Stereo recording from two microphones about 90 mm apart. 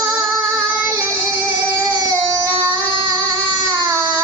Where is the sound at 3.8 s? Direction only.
40° right (ahead or behind).